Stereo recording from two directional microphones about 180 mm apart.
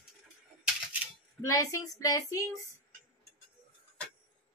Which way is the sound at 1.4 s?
20° left (ahead or behind).